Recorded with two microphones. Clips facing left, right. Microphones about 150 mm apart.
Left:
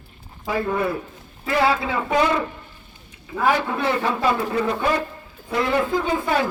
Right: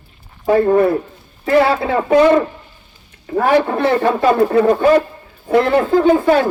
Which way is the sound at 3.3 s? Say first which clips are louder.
Right 7 dB; 50° right (ahead or behind).